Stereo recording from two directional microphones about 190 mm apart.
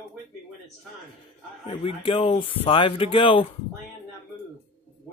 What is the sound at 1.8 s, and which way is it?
Speech, 25° left (ahead or behind).